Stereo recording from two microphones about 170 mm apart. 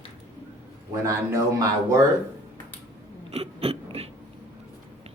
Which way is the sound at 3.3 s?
35° right (ahead or behind).